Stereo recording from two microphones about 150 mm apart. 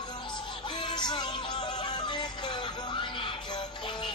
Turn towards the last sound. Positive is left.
turn(degrees=30)  # may be behind; listen again after turning